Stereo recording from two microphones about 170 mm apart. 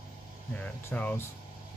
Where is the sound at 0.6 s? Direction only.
10° left (ahead or behind).